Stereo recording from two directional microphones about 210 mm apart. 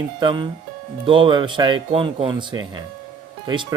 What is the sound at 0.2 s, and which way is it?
Speech, 20° right (ahead or behind).